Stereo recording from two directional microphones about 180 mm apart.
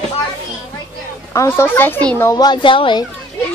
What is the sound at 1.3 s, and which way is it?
Speech, 15° left (ahead or behind).